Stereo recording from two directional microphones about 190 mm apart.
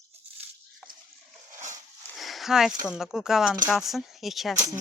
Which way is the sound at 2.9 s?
5° right (ahead or behind).